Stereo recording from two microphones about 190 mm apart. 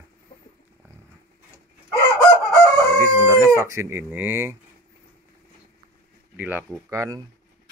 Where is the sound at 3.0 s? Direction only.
15° right (ahead or behind).